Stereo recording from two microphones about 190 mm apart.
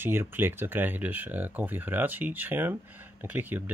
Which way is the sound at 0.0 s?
10° right (ahead or behind).